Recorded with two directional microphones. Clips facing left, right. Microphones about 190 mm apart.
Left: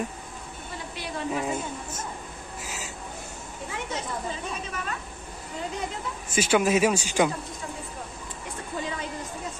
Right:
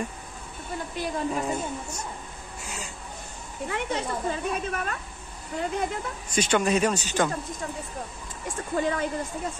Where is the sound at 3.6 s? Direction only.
60° right (ahead or behind).